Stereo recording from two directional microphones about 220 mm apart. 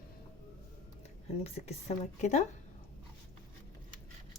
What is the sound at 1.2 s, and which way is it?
Speech, 30° left (ahead or behind).